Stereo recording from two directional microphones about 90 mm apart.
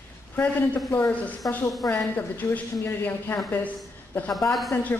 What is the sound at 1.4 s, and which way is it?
Speech, 40° left (ahead or behind).